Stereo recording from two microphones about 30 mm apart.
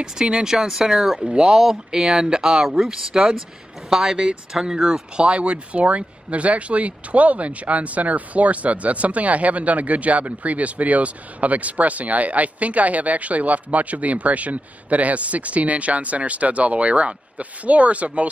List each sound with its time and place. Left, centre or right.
0.0 s speech: right
2.1 s speech: right
2.4 s speech: centre
5.2 s speech: right